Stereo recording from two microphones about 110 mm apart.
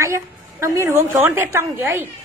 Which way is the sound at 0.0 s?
25° right (ahead or behind).